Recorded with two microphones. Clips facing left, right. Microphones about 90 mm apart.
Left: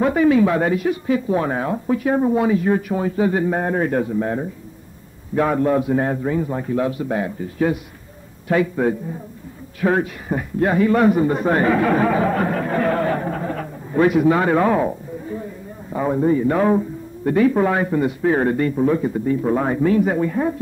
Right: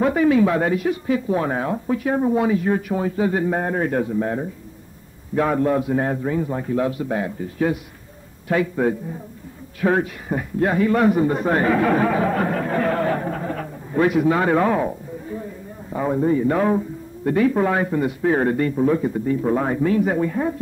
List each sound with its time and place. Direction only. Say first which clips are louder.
0.0 s speech: left 1 dB; 10° left (ahead or behind)
9.8 s speech: left 1 dB; 10° left (ahead or behind)
10.6 s speech: left 2 dB; 20° left (ahead or behind)
13.3 s a sound: left 1 dB; 15° left (ahead or behind)
14.4 s speech: left 1 dB; 5° left (ahead or behind)
15.9 s speech: left 2 dB; 15° left (ahead or behind)